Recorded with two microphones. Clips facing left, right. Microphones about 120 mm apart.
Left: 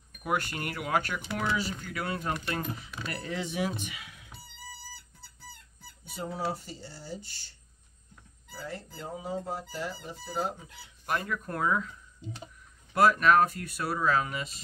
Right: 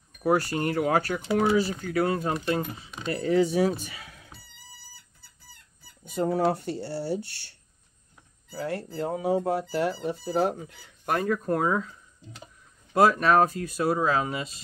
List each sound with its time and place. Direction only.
0.2 s speech: 35° right (ahead or behind)
6.0 s speech: 55° right (ahead or behind)
8.5 s speech: 65° right (ahead or behind); by 11.9 s 30° right (ahead or behind)
12.9 s speech: 30° right (ahead or behind)